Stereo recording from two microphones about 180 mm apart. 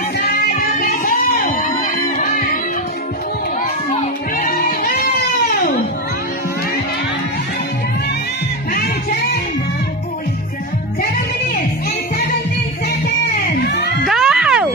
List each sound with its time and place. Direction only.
0.5 s music: 50° left (ahead or behind)
4.4 s music: 55° left (ahead or behind)
8.7 s music: 55° left (ahead or behind)
13.7 s music: 70° left (ahead or behind)
14.0 s music: centre (ahead or behind)